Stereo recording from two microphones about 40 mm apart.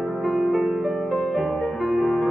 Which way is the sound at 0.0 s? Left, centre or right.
Centre.